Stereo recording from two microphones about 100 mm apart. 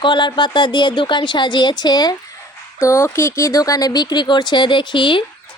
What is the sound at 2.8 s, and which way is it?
A woman's voice, 30° left (ahead or behind).